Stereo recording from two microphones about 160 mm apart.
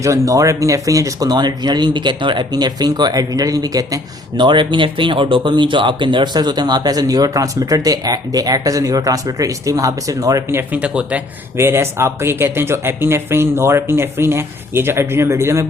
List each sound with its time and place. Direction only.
0.0 s speech: 20° right (ahead or behind)